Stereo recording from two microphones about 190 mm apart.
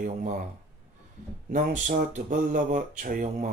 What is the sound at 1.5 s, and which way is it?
Speech, 40° right (ahead or behind).